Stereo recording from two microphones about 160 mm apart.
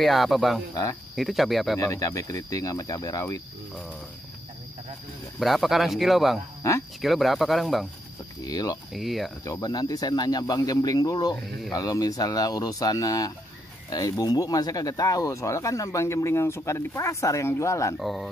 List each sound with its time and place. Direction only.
0.0 s speech: centre (ahead or behind)
1.8 s speech: 20° left (ahead or behind)
5.4 s speech: centre (ahead or behind)
8.5 s speech: 25° left (ahead or behind)
8.9 s speech: centre (ahead or behind)
9.4 s speech: 20° left (ahead or behind)
17.9 s speech: centre (ahead or behind)